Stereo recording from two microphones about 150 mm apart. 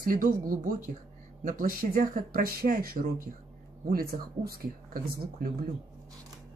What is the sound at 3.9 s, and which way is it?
Speech, 90° right.